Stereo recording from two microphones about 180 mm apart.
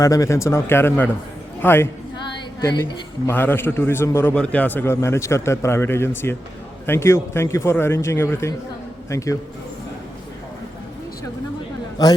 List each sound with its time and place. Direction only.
0.0 s a man's voice: 20° left (ahead or behind)
3.2 s a man's voice: 10° left (ahead or behind)